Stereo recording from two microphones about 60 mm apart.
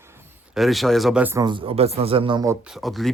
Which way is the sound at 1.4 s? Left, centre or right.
Right.